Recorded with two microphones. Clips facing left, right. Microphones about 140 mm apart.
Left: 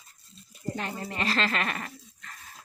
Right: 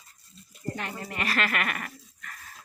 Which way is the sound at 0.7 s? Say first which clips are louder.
Left 3 dB; 25° left (ahead or behind).